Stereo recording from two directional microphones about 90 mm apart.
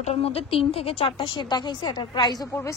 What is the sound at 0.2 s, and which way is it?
A woman's voice, 90° left.